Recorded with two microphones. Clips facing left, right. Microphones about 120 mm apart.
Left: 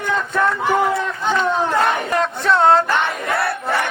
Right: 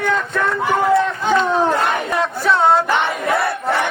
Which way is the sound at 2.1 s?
Centre (ahead or behind).